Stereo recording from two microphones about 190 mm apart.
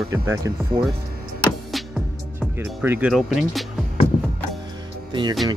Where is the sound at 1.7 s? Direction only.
Centre (ahead or behind).